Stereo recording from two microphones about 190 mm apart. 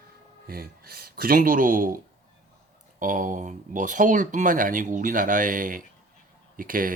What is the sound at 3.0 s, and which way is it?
Speech, 45° right (ahead or behind).